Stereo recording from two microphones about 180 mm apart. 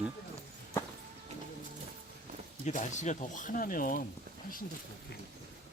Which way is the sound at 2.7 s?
40° left (ahead or behind).